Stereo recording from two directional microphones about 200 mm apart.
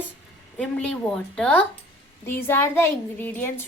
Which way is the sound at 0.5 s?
5° left (ahead or behind).